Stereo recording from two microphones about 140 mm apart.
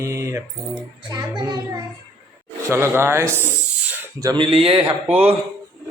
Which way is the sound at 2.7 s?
20° right (ahead or behind).